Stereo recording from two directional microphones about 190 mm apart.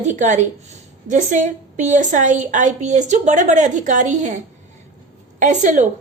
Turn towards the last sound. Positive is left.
turn(degrees=-40)  # may be behind; listen again after turning